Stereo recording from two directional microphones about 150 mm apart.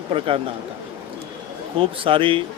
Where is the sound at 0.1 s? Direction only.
40° right (ahead or behind).